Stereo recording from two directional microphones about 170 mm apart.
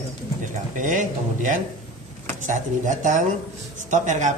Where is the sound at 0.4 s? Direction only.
50° right (ahead or behind).